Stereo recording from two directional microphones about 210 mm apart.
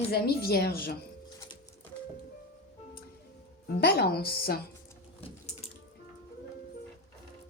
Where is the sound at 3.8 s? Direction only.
50° left (ahead or behind).